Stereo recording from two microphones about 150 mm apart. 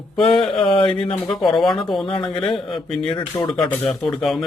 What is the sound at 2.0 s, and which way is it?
Speech, 30° left (ahead or behind).